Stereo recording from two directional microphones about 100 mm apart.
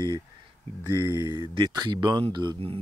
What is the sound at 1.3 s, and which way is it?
Speech, 50° right (ahead or behind).